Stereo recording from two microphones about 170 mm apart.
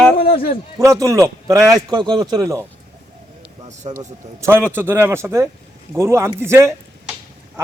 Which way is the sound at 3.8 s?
35° right (ahead or behind).